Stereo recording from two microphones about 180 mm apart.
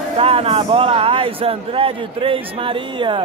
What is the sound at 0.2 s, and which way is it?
Speech, 30° right (ahead or behind).